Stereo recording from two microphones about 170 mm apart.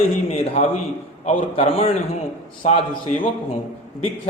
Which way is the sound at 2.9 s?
55° left (ahead or behind).